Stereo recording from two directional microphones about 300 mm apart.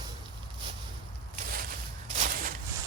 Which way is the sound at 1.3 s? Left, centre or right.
Right.